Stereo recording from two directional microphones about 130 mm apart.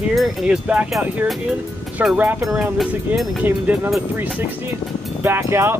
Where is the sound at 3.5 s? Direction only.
15° right (ahead or behind).